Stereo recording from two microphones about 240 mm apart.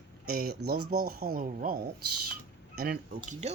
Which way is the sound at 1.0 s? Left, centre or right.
Right.